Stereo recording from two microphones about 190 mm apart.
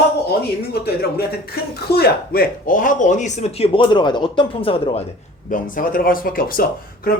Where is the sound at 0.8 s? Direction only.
60° left (ahead or behind); by 5.1 s 30° left (ahead or behind).